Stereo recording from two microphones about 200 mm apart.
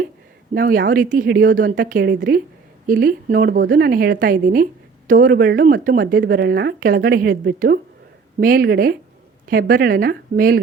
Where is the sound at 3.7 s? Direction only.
45° right (ahead or behind).